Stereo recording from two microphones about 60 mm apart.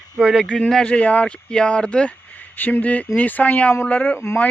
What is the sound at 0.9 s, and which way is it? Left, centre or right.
Speech, left.